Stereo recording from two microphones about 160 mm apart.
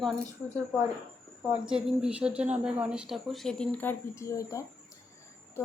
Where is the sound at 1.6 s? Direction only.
5° right (ahead or behind).